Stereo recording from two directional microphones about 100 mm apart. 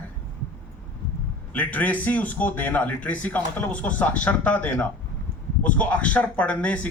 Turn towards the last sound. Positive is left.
turn(degrees=15)  # may be behind; listen again after turning